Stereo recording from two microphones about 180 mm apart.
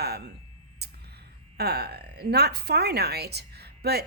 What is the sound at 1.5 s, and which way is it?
Speech, 65° right (ahead or behind).